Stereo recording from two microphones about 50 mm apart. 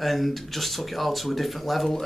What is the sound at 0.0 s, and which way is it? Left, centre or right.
Speech, centre.